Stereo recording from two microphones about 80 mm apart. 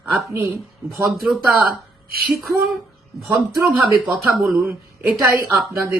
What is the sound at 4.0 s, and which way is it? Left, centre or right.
Speech, centre.